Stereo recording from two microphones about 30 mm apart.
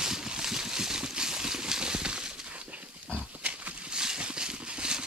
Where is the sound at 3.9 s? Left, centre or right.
Right.